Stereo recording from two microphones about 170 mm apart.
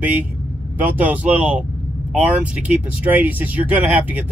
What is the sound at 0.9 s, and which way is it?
Speech, 10° right (ahead or behind).